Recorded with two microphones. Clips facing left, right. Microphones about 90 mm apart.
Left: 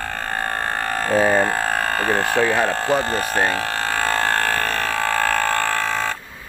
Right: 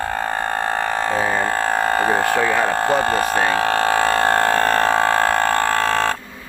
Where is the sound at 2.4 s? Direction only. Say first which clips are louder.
Even; 10° right (ahead or behind).